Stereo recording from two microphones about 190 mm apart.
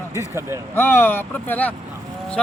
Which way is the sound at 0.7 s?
10° left (ahead or behind).